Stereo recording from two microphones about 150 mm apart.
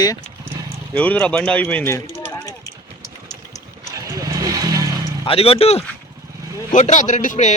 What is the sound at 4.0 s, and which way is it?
Vehicle, 20° right (ahead or behind).